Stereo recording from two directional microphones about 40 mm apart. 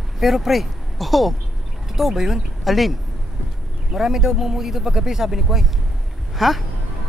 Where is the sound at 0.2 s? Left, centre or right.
Centre.